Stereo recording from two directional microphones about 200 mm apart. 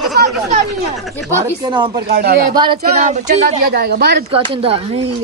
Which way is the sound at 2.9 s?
35° right (ahead or behind).